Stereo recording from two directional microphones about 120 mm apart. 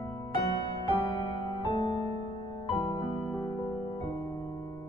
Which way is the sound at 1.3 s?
40° left (ahead or behind).